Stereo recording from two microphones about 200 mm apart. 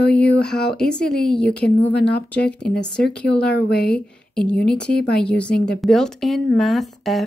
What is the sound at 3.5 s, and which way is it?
Speech, 55° left (ahead or behind).